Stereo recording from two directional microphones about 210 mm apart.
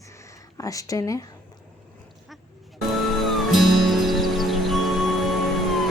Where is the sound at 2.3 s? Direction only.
Centre (ahead or behind).